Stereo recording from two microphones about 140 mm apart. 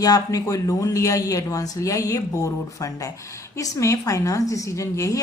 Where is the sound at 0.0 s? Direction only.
25° left (ahead or behind).